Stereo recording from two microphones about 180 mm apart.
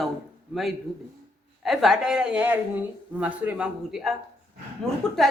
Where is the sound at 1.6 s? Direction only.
Centre (ahead or behind).